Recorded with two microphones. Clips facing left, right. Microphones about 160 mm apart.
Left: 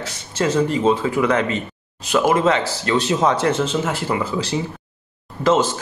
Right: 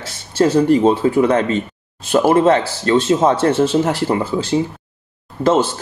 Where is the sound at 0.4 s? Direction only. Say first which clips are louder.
Right 6 dB; 40° right (ahead or behind).